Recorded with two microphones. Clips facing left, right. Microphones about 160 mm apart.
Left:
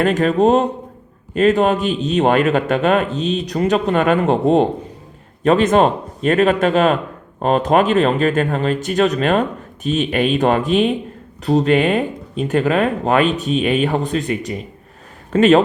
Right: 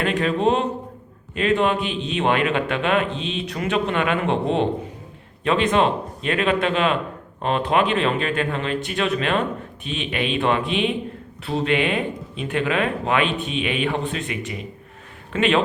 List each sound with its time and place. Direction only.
0.0 s a man's voice: 45° left (ahead or behind)